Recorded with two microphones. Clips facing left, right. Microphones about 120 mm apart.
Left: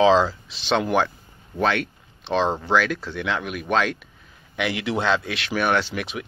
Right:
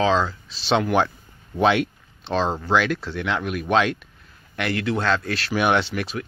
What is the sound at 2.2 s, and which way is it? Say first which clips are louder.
Speech: left 1 dB; 15° left (ahead or behind).